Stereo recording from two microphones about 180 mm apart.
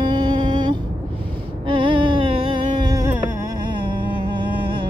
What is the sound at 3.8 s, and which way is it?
Humming, 30° right (ahead or behind).